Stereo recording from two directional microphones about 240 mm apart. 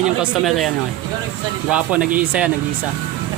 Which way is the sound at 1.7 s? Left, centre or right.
Centre.